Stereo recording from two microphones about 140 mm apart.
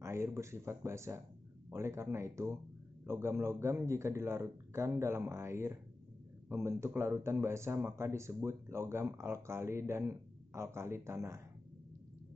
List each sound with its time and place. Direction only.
0.0 s speech: 20° right (ahead or behind)